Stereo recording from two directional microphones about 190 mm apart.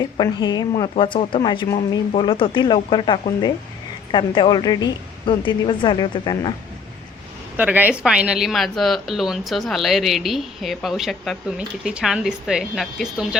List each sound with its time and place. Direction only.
0.0 s speech: 20° left (ahead or behind)
7.5 s a woman's voice: 10° right (ahead or behind)